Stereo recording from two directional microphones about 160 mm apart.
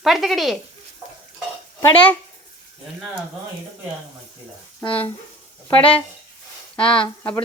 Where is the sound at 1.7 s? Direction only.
15° left (ahead or behind).